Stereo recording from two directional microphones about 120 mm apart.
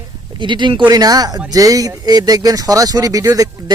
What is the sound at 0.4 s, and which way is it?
Speech, 40° right (ahead or behind).